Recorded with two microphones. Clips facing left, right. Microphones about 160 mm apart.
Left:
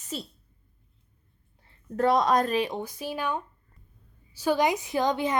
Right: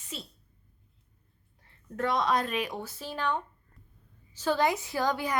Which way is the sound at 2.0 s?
40° left (ahead or behind).